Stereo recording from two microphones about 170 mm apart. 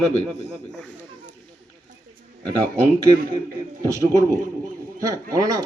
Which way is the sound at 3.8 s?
20° right (ahead or behind).